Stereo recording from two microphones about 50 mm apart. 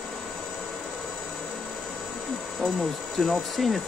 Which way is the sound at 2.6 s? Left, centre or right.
Centre.